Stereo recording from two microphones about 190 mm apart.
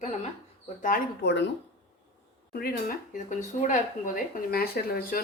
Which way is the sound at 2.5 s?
55° left (ahead or behind).